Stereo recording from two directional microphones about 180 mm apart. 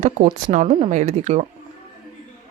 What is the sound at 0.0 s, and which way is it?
Speech, 45° right (ahead or behind).